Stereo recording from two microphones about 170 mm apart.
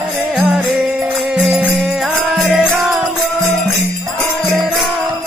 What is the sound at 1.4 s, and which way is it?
Music, centre (ahead or behind).